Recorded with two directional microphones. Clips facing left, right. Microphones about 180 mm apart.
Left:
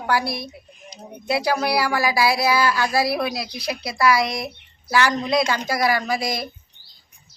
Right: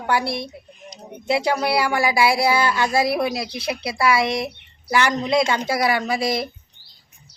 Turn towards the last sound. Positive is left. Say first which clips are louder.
# right 2 dB
turn(degrees=-25)  # may be behind; listen again after turning